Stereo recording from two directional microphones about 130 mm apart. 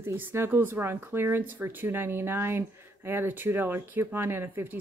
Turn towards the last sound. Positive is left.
turn(degrees=-15)  # may be behind; listen again after turning